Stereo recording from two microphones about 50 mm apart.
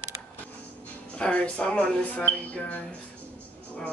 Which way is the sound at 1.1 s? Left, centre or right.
Left.